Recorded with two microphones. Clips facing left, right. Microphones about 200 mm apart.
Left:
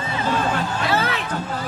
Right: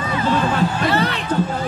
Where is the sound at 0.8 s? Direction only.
Centre (ahead or behind).